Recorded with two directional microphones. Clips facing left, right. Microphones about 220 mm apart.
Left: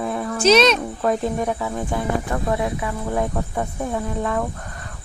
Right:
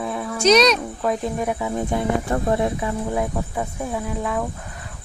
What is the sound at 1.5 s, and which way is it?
Speech, 20° right (ahead or behind).